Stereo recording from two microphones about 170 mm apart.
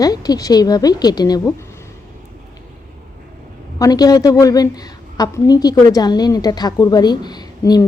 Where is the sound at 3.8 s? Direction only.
20° left (ahead or behind).